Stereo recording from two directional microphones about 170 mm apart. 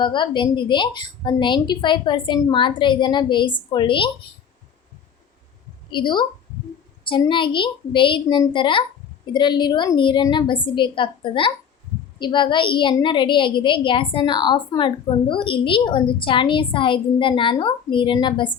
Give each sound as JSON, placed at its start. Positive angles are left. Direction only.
{"t": 0.0, "sound": "a woman's voice", "side_deg": 30}
{"t": 5.9, "sound": "a woman's voice", "side_deg": 25}